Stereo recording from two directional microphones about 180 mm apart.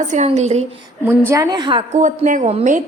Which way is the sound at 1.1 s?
15° right (ahead or behind).